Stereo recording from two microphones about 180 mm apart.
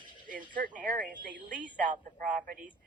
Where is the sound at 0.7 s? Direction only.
50° right (ahead or behind).